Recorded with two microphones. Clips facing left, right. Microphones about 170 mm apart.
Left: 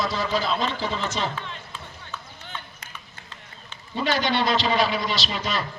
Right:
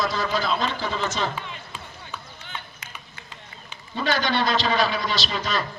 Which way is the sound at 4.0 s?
25° left (ahead or behind).